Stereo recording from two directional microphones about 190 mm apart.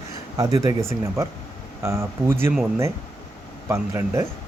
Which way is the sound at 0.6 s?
15° right (ahead or behind).